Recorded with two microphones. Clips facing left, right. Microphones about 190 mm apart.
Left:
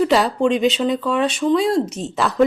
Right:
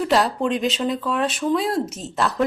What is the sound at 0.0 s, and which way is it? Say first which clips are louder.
Speech: left 4 dB; centre (ahead or behind).